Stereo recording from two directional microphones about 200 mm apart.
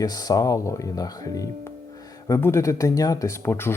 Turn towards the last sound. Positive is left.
turn(degrees=10)  # may be behind; listen again after turning